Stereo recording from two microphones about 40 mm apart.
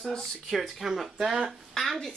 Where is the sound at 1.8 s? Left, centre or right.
Centre.